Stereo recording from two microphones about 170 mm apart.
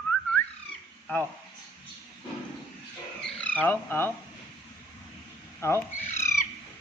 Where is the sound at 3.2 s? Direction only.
5° left (ahead or behind).